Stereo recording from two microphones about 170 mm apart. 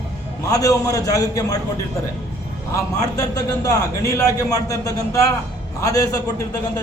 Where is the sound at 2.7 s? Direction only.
20° left (ahead or behind).